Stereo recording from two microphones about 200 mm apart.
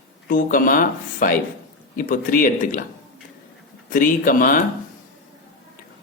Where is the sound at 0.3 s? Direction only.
45° left (ahead or behind).